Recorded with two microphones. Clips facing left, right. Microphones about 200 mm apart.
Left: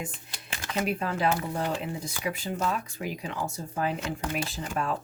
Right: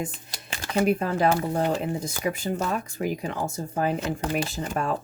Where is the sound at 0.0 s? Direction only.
40° right (ahead or behind).